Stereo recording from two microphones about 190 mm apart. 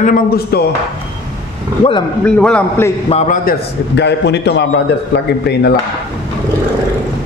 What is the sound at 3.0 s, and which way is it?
Speech, 35° left (ahead or behind).